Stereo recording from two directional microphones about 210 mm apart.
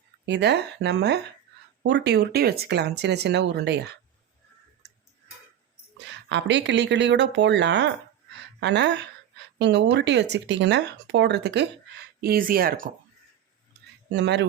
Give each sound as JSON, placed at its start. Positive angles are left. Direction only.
{"t": 0.3, "sound": "speech", "side_deg": -55}
{"t": 6.2, "sound": "speech", "side_deg": -55}
{"t": 14.1, "sound": "speech", "side_deg": -55}